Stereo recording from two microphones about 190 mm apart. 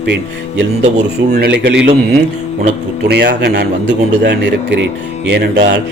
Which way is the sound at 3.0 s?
60° right (ahead or behind).